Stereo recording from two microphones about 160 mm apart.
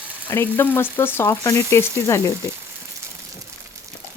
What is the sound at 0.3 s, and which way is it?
Speech, 15° left (ahead or behind).